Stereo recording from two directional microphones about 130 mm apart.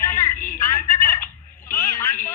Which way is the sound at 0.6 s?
25° left (ahead or behind).